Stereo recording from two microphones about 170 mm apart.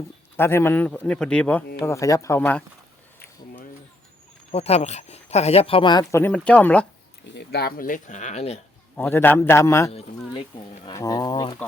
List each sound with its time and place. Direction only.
0.3 s a man's voice: 15° left (ahead or behind)
2.4 s a man's voice: 5° left (ahead or behind)
4.5 s speech: 40° left (ahead or behind); by 6.8 s 10° left (ahead or behind)
7.3 s speech: 70° left (ahead or behind); by 8.6 s 40° left (ahead or behind)
9.0 s a man's voice: 10° left (ahead or behind)
10.3 s speech: 30° left (ahead or behind)
10.9 s speech: 20° left (ahead or behind)